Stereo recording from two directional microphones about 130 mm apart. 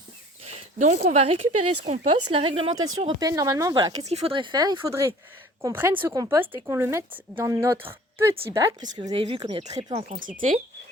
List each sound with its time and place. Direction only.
0.8 s speech: 60° right (ahead or behind)
2.3 s speech: 50° right (ahead or behind)
3.2 s speech: 30° right (ahead or behind)
4.0 s speech: 55° right (ahead or behind); by 4.9 s 35° right (ahead or behind)
4.9 s speech: 20° right (ahead or behind)
8.8 s speech: 35° right (ahead or behind)
9.5 s speech: 55° right (ahead or behind)
10.1 s speech: 90° right